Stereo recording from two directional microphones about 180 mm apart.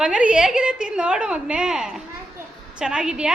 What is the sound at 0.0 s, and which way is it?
A woman's voice, 5° right (ahead or behind).